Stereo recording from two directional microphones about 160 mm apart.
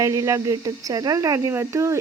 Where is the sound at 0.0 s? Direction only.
20° right (ahead or behind).